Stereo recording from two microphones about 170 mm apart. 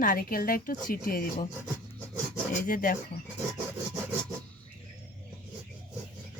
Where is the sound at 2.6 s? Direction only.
55° left (ahead or behind).